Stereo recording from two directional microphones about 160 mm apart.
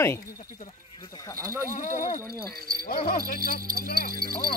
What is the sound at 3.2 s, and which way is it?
Speech, 70° left (ahead or behind).